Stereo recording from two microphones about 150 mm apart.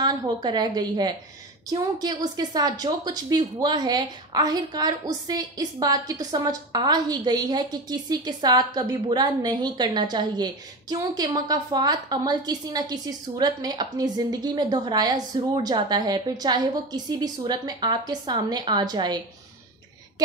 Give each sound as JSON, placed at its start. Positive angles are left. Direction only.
{"t": 0.0, "sound": "a woman's voice", "side_deg": -30}